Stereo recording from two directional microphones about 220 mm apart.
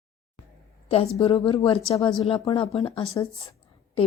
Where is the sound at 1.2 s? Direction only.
25° left (ahead or behind).